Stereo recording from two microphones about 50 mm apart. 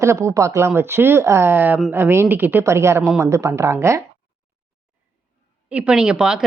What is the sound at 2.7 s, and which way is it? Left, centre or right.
Speech, right.